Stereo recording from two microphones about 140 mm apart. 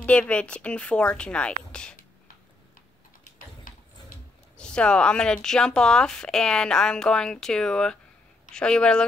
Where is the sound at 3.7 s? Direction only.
80° left.